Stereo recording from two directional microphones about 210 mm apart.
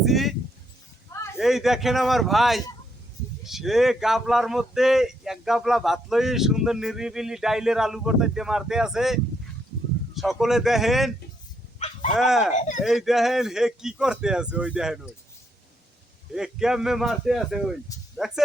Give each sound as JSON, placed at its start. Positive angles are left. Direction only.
{"t": 0.0, "sound": "speech", "side_deg": 0}
{"t": 1.4, "sound": "speech", "side_deg": 0}
{"t": 12.1, "sound": "speech", "side_deg": 0}
{"t": 12.5, "sound": "speech", "side_deg": 35}
{"t": 12.8, "sound": "speech", "side_deg": 0}
{"t": 16.3, "sound": "speech", "side_deg": -5}